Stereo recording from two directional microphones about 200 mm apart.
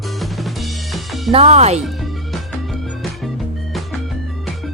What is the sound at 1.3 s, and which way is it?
Speech, 35° right (ahead or behind).